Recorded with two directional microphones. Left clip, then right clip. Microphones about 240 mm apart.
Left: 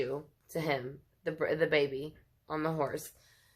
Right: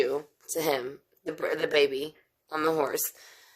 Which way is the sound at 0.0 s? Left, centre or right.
Right.